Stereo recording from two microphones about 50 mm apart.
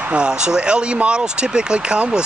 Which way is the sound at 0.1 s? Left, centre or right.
Centre.